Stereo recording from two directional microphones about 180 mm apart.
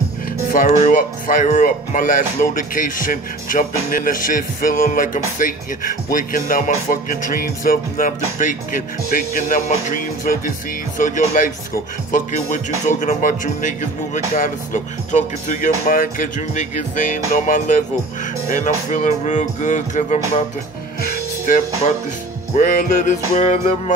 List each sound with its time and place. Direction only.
0.5 s music: 50° left (ahead or behind)
22.5 s music: 45° left (ahead or behind)